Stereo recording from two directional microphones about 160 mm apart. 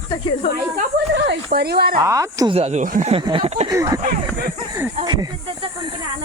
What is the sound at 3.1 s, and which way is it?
Speech, 35° right (ahead or behind).